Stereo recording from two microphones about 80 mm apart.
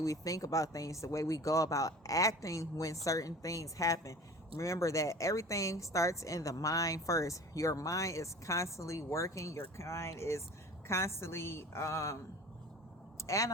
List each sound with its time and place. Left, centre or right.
0.0 s speech: left
13.2 s speech: left